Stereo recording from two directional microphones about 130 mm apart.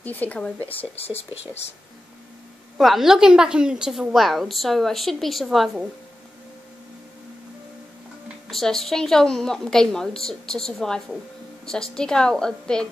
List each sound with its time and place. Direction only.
0.0 s speech: 15° left (ahead or behind)
1.1 s speech: 55° left (ahead or behind)
2.8 s a woman's voice: centre (ahead or behind)
8.5 s a woman's voice: centre (ahead or behind)